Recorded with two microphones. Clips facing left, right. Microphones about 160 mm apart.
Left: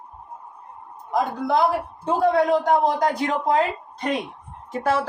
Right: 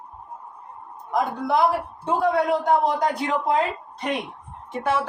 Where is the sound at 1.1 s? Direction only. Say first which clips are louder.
Left 1 dB; 35° left (ahead or behind).